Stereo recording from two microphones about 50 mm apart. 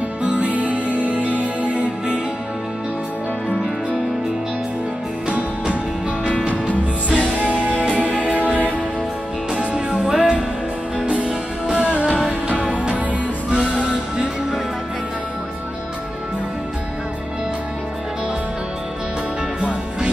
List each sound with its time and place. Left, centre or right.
0.2 s music: right
6.3 s music: left
7.3 s music: right
9.5 s music: centre